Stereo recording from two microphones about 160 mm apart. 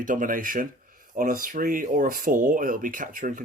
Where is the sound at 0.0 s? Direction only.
55° right (ahead or behind).